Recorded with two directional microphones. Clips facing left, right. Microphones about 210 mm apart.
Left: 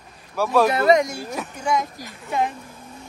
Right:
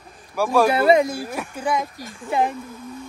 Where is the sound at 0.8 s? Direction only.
30° right (ahead or behind).